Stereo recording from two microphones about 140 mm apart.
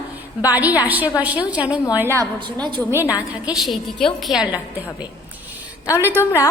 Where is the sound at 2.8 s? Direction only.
15° right (ahead or behind).